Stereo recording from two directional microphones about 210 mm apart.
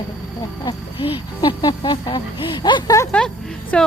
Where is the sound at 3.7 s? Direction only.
5° left (ahead or behind).